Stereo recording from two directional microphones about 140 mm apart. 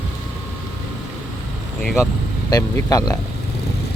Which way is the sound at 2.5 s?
25° left (ahead or behind).